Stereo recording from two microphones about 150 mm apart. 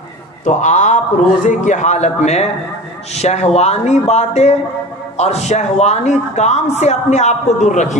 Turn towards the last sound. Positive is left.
turn(degrees=55)  # may be behind; listen again after turning